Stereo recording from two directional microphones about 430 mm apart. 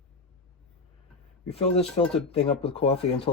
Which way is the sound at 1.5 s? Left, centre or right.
Centre.